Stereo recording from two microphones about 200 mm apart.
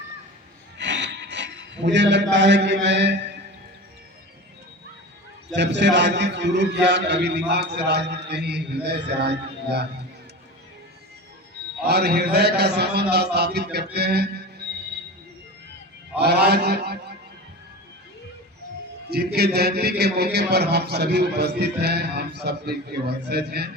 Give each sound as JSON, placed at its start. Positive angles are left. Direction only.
{"t": 0.8, "sound": "a sound", "side_deg": -60}
{"t": 2.3, "sound": "a man's voice", "side_deg": -60}
{"t": 5.5, "sound": "a man's voice", "side_deg": -60}
{"t": 11.9, "sound": "a man's voice", "side_deg": -55}
{"t": 16.1, "sound": "a man's voice", "side_deg": -55}
{"t": 19.1, "sound": "a man's voice", "side_deg": -55}